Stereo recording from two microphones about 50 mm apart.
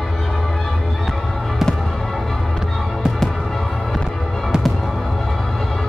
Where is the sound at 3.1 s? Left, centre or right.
Centre.